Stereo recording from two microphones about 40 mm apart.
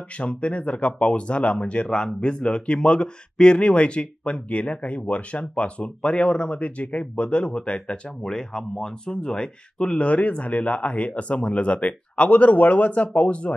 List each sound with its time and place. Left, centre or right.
0.2 s speech: left